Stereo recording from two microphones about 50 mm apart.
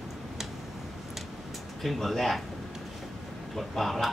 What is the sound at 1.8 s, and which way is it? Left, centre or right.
Speech, centre.